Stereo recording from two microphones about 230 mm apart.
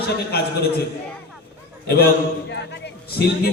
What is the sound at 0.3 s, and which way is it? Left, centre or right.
Speech, left.